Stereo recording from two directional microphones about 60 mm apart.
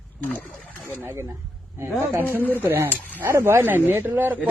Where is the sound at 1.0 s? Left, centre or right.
Right.